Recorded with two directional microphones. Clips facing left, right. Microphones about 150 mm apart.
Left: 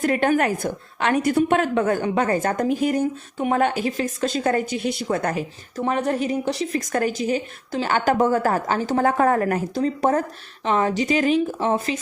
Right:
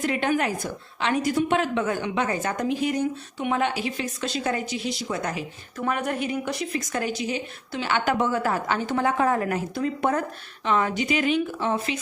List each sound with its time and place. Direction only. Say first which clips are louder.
0.0 s a woman's voice: left 5 dB; 50° left (ahead or behind)
5.8 s speech: left 4 dB; 30° left (ahead or behind)
6.7 s a woman's voice: left 5 dB; 50° left (ahead or behind)
9.7 s speech: left 4 dB; 35° left (ahead or behind)